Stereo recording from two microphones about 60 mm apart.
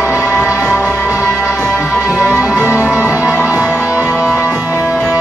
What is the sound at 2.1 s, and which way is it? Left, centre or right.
Music, left.